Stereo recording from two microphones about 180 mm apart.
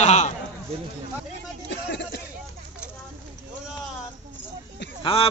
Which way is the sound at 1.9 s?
70° left (ahead or behind).